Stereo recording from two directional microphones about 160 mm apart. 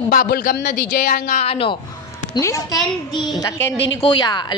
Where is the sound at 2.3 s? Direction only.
20° left (ahead or behind).